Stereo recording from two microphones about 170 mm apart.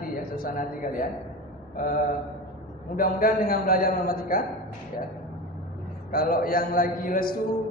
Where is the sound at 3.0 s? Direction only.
60° left (ahead or behind).